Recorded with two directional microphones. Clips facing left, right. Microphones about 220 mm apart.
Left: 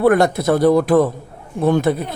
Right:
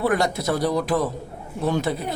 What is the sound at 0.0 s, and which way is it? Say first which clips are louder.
A man's voice: left 8 dB; 55° left (ahead or behind).